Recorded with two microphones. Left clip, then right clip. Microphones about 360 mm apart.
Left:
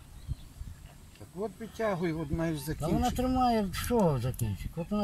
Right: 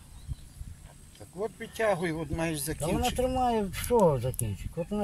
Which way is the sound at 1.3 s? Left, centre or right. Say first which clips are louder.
Right 3 dB; right.